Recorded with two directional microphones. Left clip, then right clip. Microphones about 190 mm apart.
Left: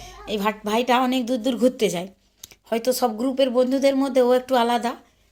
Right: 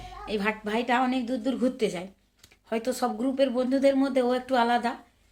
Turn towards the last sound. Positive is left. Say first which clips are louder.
# left 4 dB
turn(degrees=30)  # may be behind; listen again after turning